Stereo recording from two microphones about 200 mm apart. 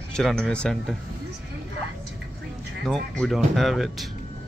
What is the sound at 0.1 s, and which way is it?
Speech, centre (ahead or behind).